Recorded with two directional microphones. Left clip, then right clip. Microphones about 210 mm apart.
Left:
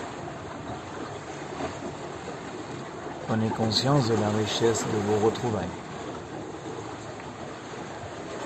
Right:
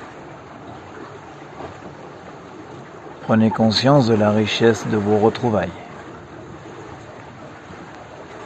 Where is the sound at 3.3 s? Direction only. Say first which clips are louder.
Right 10 dB; 45° right (ahead or behind).